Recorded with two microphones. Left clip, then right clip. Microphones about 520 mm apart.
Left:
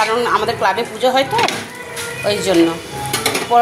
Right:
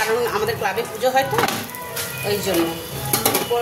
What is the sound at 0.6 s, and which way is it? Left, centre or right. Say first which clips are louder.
Speech: left 6 dB; right.